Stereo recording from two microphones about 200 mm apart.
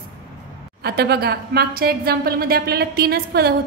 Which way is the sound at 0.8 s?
55° right (ahead or behind).